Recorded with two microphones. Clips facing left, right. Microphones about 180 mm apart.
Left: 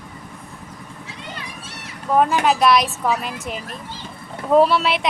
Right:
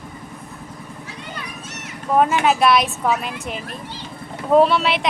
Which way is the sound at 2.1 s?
Centre (ahead or behind).